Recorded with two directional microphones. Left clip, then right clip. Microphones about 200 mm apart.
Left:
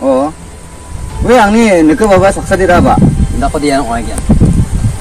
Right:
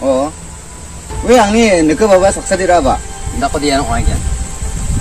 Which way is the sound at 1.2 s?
15° right (ahead or behind).